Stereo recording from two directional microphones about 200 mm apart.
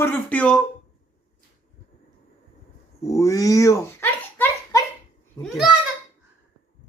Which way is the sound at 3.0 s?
15° left (ahead or behind).